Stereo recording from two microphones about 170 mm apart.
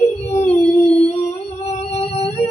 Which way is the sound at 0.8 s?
40° left (ahead or behind).